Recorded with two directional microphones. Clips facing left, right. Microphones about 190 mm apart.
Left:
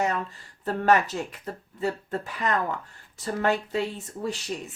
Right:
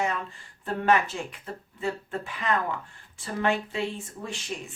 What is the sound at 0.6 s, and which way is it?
Speech, 40° left (ahead or behind).